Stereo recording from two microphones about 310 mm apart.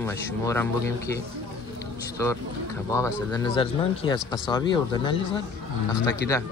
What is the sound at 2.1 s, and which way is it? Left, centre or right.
Speech, centre.